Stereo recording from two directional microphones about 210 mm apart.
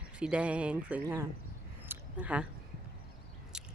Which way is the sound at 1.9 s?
5° right (ahead or behind).